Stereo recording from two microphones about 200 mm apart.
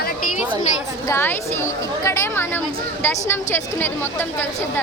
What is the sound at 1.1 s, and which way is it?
A woman's voice, 10° left (ahead or behind).